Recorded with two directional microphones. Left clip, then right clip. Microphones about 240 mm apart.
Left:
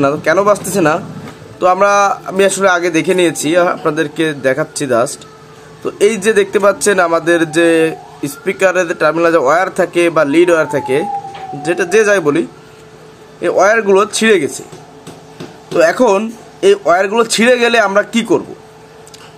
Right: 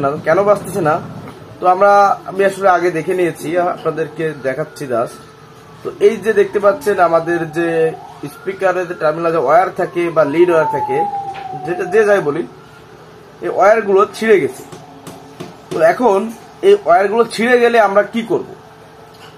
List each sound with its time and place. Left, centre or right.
0.0 s a man's voice: left
15.8 s a man's voice: left